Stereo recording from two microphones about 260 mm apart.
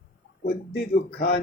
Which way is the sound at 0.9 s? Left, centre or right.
Left.